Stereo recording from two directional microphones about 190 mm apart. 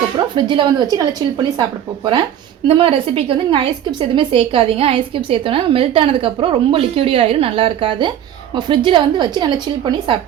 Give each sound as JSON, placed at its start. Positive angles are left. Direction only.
{"t": 0.3, "sound": "a woman's voice", "side_deg": -25}
{"t": 2.6, "sound": "a woman's voice", "side_deg": -30}